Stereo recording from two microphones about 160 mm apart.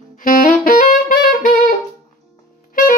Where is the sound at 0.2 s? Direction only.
60° left (ahead or behind).